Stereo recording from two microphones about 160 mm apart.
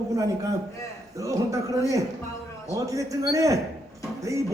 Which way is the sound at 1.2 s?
20° right (ahead or behind).